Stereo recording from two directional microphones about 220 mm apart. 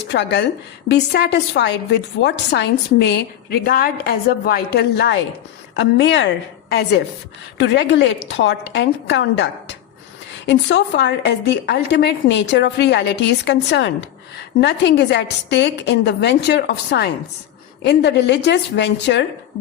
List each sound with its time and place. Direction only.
0.1 s a woman's voice: 50° left (ahead or behind)